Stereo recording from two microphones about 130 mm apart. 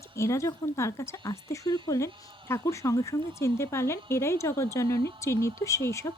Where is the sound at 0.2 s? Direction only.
25° left (ahead or behind).